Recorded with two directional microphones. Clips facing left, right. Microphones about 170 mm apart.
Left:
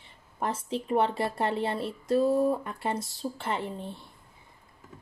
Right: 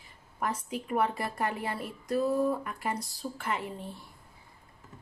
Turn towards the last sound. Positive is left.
turn(degrees=30)  # may be behind; listen again after turning